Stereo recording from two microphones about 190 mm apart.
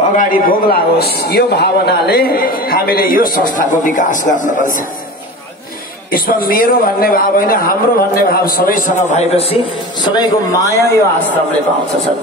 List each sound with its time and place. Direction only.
0.2 s a man's voice: 50° left (ahead or behind)
6.1 s a man's voice: 50° left (ahead or behind); by 9.6 s 30° left (ahead or behind)
10.0 s a man's voice: 20° left (ahead or behind)